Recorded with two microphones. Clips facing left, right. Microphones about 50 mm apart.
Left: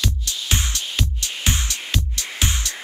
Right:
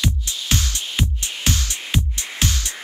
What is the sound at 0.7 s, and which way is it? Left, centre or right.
Music, right.